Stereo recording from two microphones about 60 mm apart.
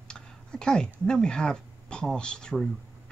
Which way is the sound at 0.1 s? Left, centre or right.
Centre.